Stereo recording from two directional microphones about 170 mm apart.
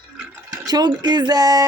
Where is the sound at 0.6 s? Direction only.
25° right (ahead or behind).